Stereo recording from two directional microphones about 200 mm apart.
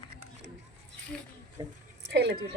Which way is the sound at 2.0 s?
60° right (ahead or behind).